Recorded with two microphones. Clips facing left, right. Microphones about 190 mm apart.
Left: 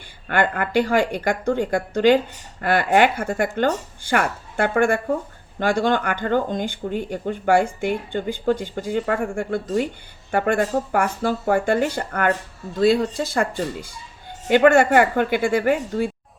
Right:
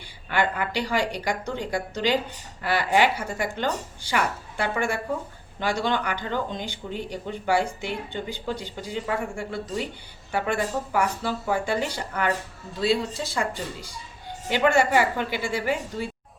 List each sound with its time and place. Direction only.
0.3 s a woman's voice: 55° left (ahead or behind)